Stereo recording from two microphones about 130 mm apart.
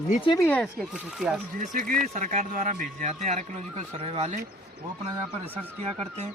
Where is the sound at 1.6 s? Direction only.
90° right.